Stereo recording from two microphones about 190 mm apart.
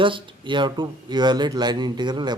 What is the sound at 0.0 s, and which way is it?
Speech, 25° right (ahead or behind).